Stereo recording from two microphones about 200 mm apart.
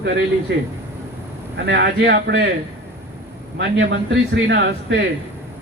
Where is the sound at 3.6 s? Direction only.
60° right (ahead or behind).